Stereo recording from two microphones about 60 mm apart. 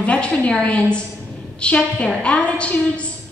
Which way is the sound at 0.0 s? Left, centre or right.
Centre.